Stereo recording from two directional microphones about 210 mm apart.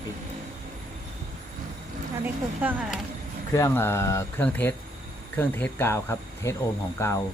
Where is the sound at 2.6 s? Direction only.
10° right (ahead or behind).